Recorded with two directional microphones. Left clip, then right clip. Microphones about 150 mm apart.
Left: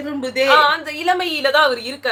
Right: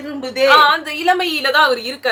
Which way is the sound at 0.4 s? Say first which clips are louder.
Right 3 dB; 15° right (ahead or behind).